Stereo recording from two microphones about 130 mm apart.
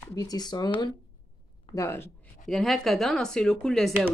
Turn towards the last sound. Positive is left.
turn(degrees=0)  # may be behind; listen again after turning